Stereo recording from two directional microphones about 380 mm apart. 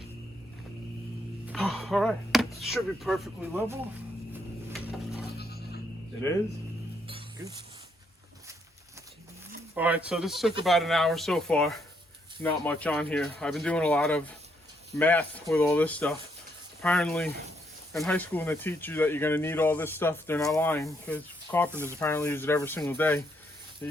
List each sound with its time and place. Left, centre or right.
1.5 s speech: centre
4.3 s a sound: centre
5.4 s goat: left
7.1 s music: centre
9.7 s speech: centre
21.7 s speech: centre
21.9 s speech: centre